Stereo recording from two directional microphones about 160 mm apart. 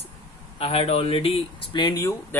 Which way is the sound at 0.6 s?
40° left (ahead or behind).